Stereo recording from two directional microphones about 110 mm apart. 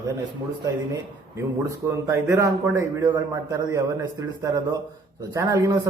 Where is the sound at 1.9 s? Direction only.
25° right (ahead or behind).